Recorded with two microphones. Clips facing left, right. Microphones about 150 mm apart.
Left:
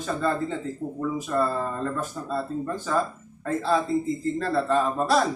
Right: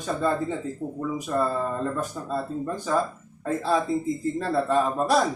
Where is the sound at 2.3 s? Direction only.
15° right (ahead or behind).